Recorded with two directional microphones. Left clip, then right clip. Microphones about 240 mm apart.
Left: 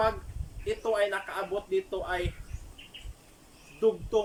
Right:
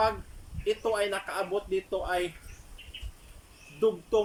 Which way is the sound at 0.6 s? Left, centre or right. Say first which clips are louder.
Even; centre.